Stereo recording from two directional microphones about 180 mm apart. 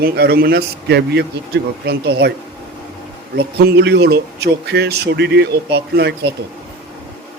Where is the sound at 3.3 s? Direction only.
70° right (ahead or behind).